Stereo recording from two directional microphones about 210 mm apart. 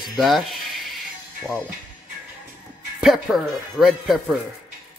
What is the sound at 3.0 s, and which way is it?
Speech, centre (ahead or behind).